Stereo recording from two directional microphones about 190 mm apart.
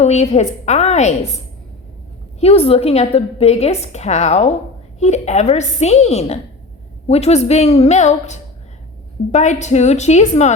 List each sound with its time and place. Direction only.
0.0 s a woman's voice: 35° left (ahead or behind)
2.4 s a woman's voice: 30° left (ahead or behind)